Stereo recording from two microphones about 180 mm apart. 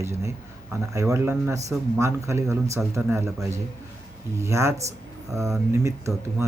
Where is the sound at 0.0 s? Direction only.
15° right (ahead or behind).